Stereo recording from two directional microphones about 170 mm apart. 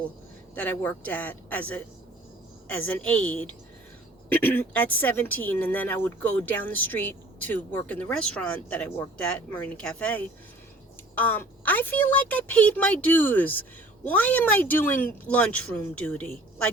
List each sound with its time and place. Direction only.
0.5 s a woman's voice: 10° left (ahead or behind)
2.8 s a woman's voice: 10° left (ahead or behind)